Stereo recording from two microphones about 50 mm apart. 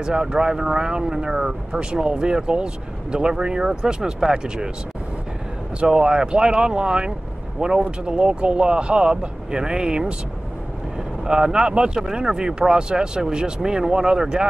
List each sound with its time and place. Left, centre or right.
0.0 s speech: centre
5.8 s speech: centre
11.2 s speech: centre